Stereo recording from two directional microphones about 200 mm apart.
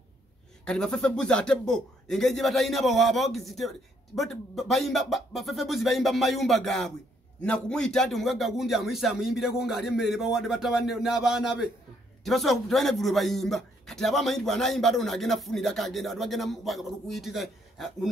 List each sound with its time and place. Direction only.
0.7 s speech: 5° left (ahead or behind)